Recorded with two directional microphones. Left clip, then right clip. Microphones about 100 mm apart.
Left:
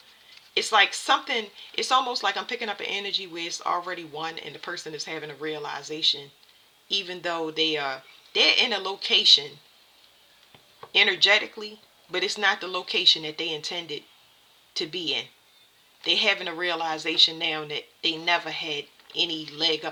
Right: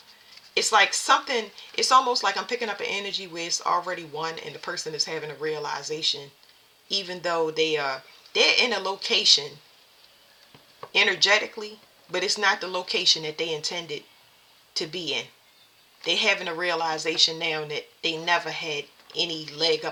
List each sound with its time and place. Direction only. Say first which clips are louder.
0.5 s speech: right 1 dB; 40° left (ahead or behind)
10.9 s speech: left 1 dB; 40° left (ahead or behind)